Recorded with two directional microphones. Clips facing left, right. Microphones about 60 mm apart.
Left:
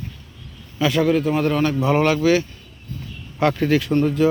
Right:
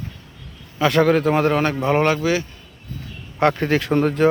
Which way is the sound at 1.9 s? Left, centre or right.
Right.